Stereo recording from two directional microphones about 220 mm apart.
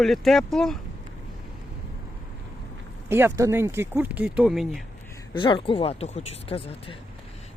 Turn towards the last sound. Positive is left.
turn(degrees=25)  # may be behind; listen again after turning